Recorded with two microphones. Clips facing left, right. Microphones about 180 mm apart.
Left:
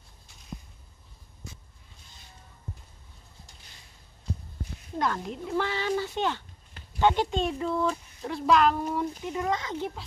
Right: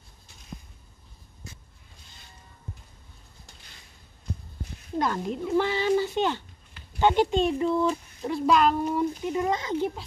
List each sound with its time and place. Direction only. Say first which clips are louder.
4.9 s speech: right 3 dB; 10° right (ahead or behind)
7.5 s speech: right 4 dB; 15° right (ahead or behind)
9.5 s speech: right 2 dB; 25° right (ahead or behind)